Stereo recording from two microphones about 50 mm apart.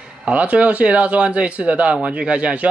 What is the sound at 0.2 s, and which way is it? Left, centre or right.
Speech, right.